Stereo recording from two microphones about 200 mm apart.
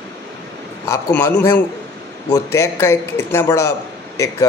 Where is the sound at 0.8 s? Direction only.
10° left (ahead or behind).